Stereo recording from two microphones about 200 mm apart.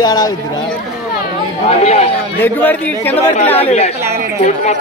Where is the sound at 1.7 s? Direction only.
30° left (ahead or behind).